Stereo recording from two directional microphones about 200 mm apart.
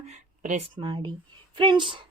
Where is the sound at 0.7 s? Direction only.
25° right (ahead or behind).